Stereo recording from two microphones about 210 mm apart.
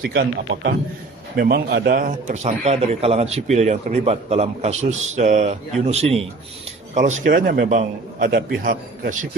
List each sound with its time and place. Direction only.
0.0 s a man's voice: 45° right (ahead or behind)